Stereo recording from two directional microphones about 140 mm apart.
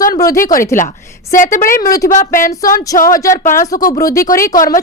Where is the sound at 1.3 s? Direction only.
70° left (ahead or behind).